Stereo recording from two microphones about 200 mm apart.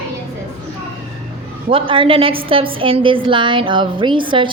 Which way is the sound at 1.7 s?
25° right (ahead or behind).